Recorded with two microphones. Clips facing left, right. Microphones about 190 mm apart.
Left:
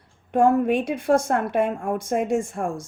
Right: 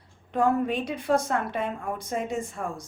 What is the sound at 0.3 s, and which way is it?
Speech, 45° left (ahead or behind).